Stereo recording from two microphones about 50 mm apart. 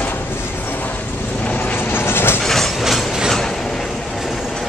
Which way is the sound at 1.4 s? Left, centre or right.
Left.